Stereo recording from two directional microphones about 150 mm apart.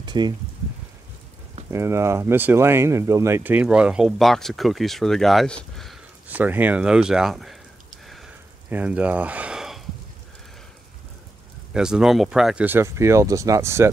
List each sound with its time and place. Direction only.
0.0 s a sound: 30° right (ahead or behind)
1.7 s speech: 20° right (ahead or behind); by 5.9 s 5° left (ahead or behind)
6.2 s speech: 10° right (ahead or behind)
8.6 s speech: 10° right (ahead or behind)
11.7 s speech: 5° right (ahead or behind)